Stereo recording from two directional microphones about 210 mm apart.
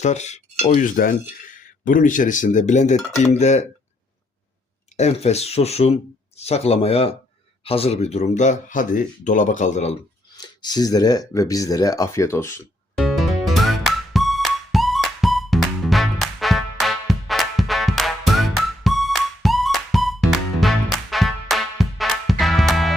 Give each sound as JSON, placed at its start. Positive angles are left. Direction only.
{"t": 0.0, "sound": "speech", "side_deg": 35}
{"t": 4.9, "sound": "speech", "side_deg": 30}
{"t": 10.3, "sound": "speech", "side_deg": 20}
{"t": 13.0, "sound": "music", "side_deg": 0}